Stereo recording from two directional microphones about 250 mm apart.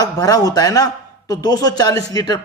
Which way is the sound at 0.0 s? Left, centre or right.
Centre.